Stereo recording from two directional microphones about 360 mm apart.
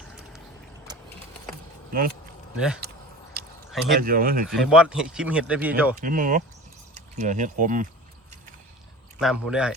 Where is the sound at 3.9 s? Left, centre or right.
Right.